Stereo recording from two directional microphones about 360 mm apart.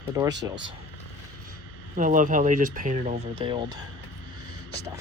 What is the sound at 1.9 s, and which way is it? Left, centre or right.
Speech, right.